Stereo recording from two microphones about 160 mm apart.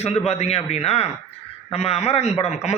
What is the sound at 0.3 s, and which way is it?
A man's voice, 40° left (ahead or behind).